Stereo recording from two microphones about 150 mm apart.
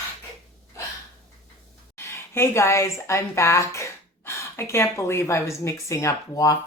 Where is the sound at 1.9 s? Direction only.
15° left (ahead or behind).